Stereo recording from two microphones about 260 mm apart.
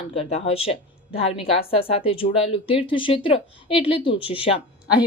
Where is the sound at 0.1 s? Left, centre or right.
Left.